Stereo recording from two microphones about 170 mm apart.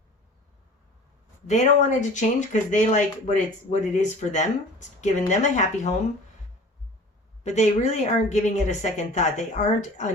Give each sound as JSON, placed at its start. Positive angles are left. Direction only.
{"t": 1.5, "sound": "speech", "side_deg": 45}
{"t": 7.4, "sound": "speech", "side_deg": 45}